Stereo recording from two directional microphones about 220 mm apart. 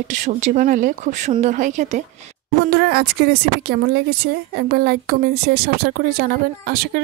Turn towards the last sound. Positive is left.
turn(degrees=-45)  # may be behind; listen again after turning